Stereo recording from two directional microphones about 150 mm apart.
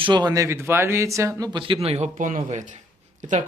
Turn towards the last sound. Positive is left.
turn(degrees=-55)  # may be behind; listen again after turning